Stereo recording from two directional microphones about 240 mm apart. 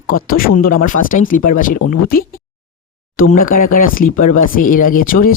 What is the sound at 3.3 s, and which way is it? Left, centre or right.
Speech, left.